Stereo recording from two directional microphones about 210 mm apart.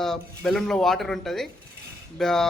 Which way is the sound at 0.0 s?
Centre (ahead or behind).